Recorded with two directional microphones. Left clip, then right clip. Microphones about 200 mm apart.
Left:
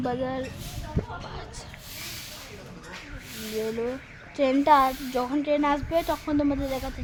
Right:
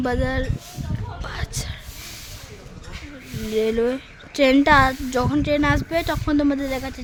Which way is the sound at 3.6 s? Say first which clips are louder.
Right 9 dB; 45° right (ahead or behind).